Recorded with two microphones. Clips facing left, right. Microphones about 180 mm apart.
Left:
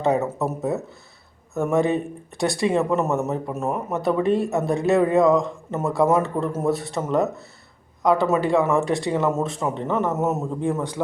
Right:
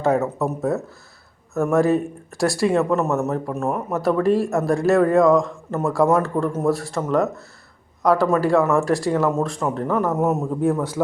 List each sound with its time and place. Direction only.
0.3 s speech: centre (ahead or behind)